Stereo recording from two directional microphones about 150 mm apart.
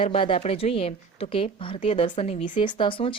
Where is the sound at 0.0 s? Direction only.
35° left (ahead or behind).